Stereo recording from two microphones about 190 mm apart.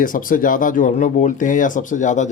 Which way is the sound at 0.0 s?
45° left (ahead or behind).